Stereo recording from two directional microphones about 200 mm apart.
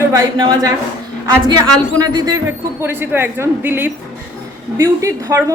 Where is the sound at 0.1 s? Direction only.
15° right (ahead or behind).